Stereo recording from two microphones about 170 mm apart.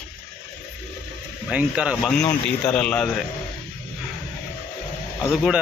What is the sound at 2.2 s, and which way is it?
Speech, 15° left (ahead or behind).